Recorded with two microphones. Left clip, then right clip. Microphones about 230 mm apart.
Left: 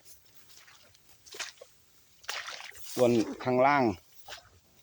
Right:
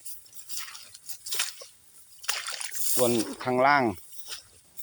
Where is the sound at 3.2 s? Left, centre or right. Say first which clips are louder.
Even; right.